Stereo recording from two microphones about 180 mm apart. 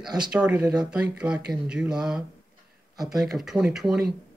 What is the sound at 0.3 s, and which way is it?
Speech, 5° right (ahead or behind).